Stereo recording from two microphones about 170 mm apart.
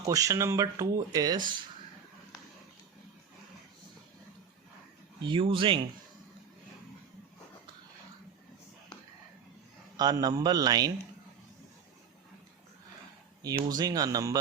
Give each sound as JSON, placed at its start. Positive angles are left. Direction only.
{"t": 0.1, "sound": "speech", "side_deg": -20}
{"t": 5.2, "sound": "speech", "side_deg": -30}
{"t": 10.0, "sound": "speech", "side_deg": -25}
{"t": 13.4, "sound": "speech", "side_deg": -20}